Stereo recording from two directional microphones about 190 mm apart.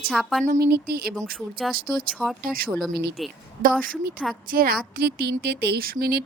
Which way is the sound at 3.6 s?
45° right (ahead or behind).